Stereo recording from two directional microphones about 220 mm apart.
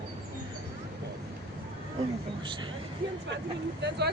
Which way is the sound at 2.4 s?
20° right (ahead or behind).